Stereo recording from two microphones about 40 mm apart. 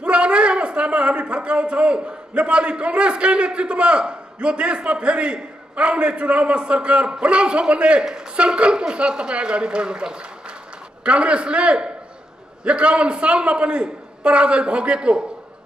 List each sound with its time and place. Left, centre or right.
0.0 s a man's voice: right